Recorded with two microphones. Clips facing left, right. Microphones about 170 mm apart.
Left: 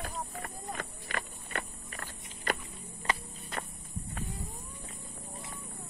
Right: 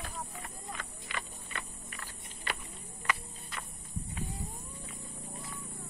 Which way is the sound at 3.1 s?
35° left (ahead or behind).